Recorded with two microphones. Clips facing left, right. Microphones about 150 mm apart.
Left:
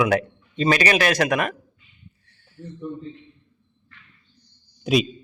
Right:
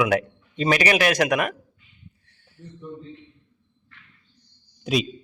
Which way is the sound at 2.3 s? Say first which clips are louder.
Left 7 dB; 20° right (ahead or behind).